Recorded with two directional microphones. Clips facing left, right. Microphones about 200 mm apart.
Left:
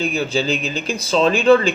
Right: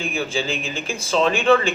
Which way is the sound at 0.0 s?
40° left (ahead or behind).